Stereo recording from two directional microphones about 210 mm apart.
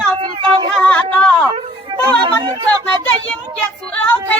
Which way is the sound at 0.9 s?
5° left (ahead or behind).